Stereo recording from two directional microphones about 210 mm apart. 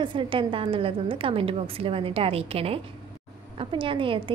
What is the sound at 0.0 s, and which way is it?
A woman's voice, 25° right (ahead or behind).